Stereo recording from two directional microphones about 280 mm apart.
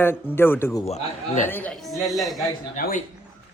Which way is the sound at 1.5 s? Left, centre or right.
Centre.